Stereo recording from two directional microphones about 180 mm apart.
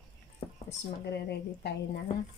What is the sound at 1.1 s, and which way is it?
Speech, 70° left (ahead or behind).